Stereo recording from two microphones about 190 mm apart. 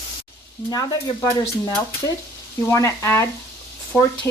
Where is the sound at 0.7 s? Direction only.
20° left (ahead or behind).